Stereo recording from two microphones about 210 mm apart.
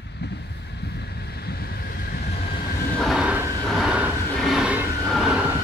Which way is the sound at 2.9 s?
Centre (ahead or behind).